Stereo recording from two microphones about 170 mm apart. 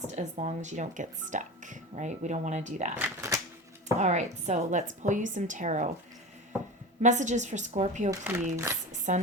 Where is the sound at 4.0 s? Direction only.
40° right (ahead or behind).